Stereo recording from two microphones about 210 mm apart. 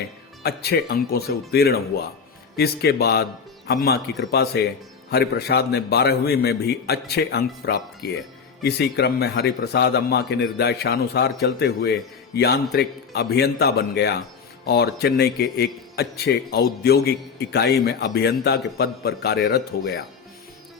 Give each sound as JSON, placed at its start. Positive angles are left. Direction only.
{"t": 0.4, "sound": "a man's voice", "side_deg": 50}